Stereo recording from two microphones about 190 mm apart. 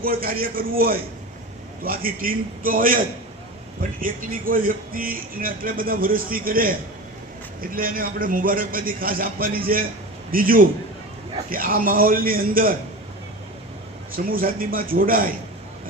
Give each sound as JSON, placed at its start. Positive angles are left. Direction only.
{"t": 0.0, "sound": "speech", "side_deg": -50}
{"t": 4.0, "sound": "speech", "side_deg": -45}
{"t": 7.8, "sound": "speech", "side_deg": -50}
{"t": 14.3, "sound": "speech", "side_deg": -50}